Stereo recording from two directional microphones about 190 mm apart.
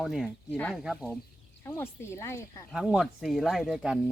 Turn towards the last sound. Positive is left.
turn(degrees=-5)  # may be behind; listen again after turning